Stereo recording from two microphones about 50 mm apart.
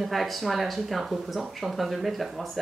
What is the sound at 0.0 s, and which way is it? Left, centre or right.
A woman's voice, centre.